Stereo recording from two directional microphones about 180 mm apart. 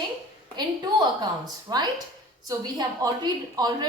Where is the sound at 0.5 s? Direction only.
25° right (ahead or behind).